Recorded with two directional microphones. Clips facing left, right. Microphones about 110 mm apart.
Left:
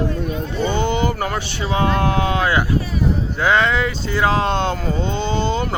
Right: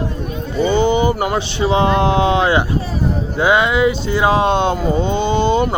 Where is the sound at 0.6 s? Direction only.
10° right (ahead or behind).